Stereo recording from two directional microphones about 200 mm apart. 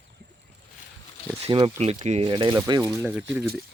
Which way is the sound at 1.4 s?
30° right (ahead or behind).